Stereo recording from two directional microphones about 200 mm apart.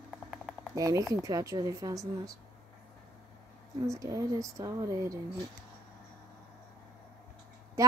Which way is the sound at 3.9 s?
15° right (ahead or behind).